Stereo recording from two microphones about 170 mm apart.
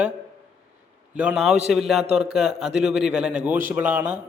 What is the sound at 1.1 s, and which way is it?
Speech, 5° right (ahead or behind).